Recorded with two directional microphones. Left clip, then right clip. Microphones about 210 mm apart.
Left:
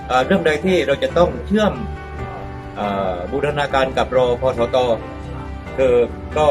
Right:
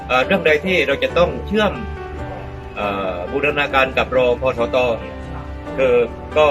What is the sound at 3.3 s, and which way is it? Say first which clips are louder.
Speech: right 3 dB; centre (ahead or behind).